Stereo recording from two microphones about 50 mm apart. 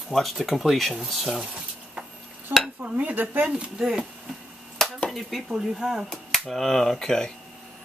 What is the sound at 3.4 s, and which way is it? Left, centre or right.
Speech, centre.